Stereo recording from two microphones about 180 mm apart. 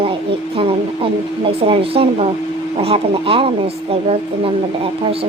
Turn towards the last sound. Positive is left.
turn(degrees=-30)  # may be behind; listen again after turning